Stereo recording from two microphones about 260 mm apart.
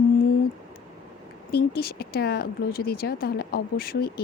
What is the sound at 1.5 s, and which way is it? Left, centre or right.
Speech, left.